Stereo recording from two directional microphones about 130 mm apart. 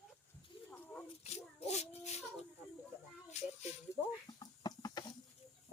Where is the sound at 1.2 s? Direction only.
55° left (ahead or behind).